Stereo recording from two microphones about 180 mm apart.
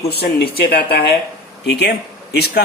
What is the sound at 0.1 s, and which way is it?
Speech, 60° left (ahead or behind).